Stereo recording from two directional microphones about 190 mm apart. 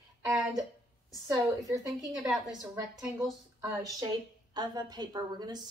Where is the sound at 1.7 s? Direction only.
20° right (ahead or behind).